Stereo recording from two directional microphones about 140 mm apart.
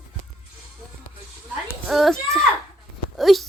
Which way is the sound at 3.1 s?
Centre (ahead or behind).